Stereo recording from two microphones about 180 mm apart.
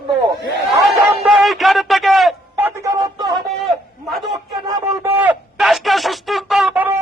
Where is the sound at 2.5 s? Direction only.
15° right (ahead or behind).